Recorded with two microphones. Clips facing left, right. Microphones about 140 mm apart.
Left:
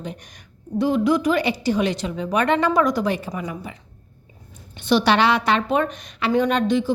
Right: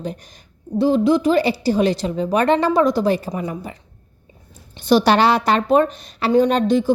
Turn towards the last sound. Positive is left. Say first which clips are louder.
# right 3 dB
turn(degrees=-40)  # may be behind; listen again after turning